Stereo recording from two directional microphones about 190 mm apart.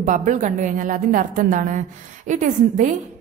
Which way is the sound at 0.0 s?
40° right (ahead or behind).